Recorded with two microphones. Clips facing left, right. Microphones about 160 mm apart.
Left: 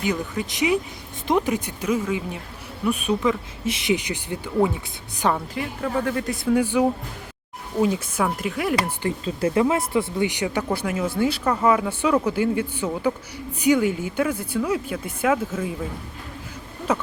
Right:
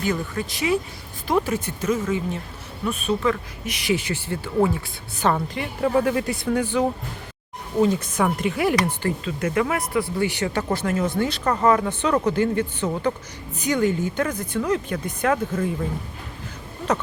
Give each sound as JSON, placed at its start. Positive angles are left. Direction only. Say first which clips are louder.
{"t": 0.0, "sound": "speech", "louder": "even", "side_deg": 15}
{"t": 3.6, "sound": "speech", "louder": "left 1 dB", "side_deg": 25}
{"t": 5.2, "sound": "speech", "louder": "right 1 dB", "side_deg": 5}
{"t": 5.8, "sound": "speech", "louder": "right 5 dB", "side_deg": -10}
{"t": 9.2, "sound": "speech", "louder": "left 5 dB", "side_deg": 30}